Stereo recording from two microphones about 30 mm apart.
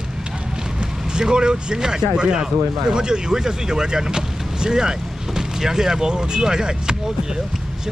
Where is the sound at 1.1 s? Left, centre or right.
Right.